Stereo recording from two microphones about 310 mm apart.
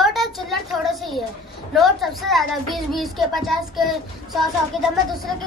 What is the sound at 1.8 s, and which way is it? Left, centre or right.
A child's voice, centre.